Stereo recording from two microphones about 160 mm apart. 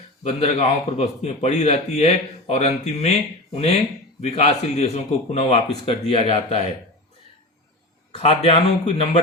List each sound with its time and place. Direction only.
0.2 s a man's voice: 40° left (ahead or behind)
8.2 s a man's voice: 40° left (ahead or behind)